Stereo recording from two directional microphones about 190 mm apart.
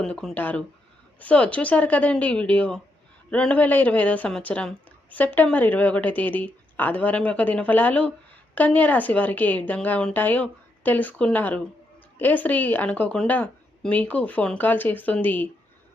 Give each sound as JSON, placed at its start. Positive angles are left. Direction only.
{"t": 0.0, "sound": "speech", "side_deg": 5}